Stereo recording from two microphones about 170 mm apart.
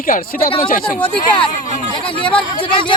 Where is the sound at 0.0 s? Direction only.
55° left (ahead or behind).